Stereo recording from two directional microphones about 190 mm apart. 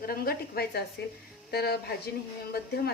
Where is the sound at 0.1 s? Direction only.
55° left (ahead or behind).